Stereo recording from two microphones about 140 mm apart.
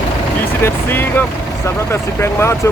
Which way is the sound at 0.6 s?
15° left (ahead or behind).